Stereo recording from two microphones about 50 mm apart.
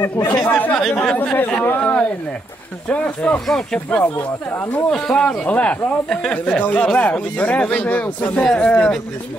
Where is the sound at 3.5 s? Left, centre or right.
Centre.